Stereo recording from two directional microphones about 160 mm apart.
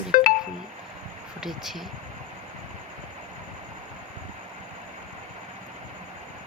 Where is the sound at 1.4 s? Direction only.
Centre (ahead or behind).